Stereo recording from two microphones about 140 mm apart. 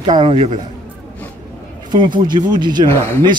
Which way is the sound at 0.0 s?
35° right (ahead or behind).